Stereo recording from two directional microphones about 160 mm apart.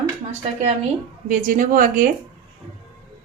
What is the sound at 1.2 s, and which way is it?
Speech, 55° right (ahead or behind).